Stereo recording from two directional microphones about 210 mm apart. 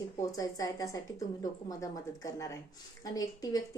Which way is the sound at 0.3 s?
15° left (ahead or behind).